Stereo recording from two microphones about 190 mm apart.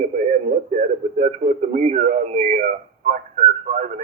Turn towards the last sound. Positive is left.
turn(degrees=-35)  # may be behind; listen again after turning